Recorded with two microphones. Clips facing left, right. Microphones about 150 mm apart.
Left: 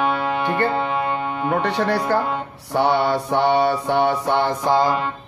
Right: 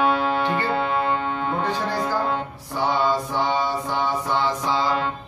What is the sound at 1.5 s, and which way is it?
Speech, 70° left (ahead or behind).